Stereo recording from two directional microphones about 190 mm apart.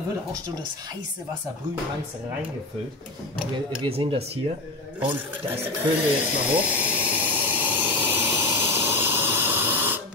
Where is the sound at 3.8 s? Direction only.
30° right (ahead or behind).